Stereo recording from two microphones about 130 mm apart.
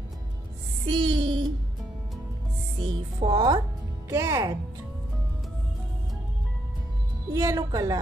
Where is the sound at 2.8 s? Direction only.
40° right (ahead or behind).